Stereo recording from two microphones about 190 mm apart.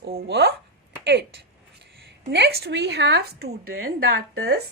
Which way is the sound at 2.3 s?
60° right (ahead or behind).